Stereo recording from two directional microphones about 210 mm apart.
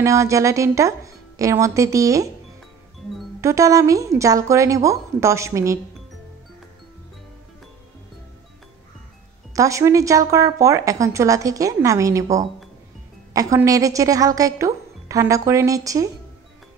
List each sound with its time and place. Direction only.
0.0 s speech: 15° right (ahead or behind)
3.3 s speech: 15° right (ahead or behind)
9.5 s speech: 15° right (ahead or behind)